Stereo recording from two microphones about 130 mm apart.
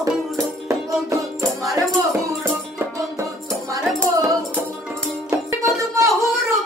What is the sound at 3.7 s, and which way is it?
Music, 25° right (ahead or behind).